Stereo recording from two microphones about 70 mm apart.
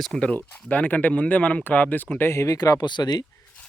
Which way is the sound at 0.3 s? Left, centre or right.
Left.